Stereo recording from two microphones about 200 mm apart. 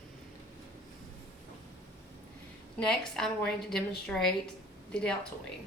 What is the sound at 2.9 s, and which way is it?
Speech, centre (ahead or behind).